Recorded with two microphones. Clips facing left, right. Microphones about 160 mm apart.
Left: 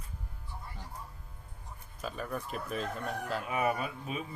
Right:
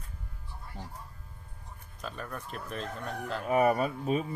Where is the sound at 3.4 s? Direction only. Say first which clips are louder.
Right 8 dB; 40° right (ahead or behind).